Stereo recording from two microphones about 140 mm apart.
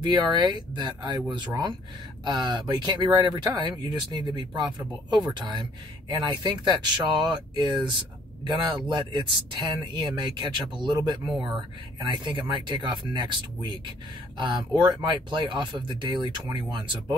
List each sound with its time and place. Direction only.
0.0 s speech: 30° right (ahead or behind)